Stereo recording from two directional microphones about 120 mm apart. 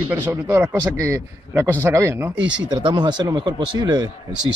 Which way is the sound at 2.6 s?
40° right (ahead or behind).